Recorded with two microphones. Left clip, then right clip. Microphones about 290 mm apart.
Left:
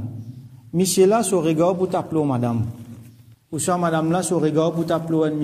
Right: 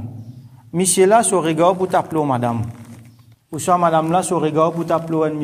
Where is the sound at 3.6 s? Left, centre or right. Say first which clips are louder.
Right 6 dB; centre.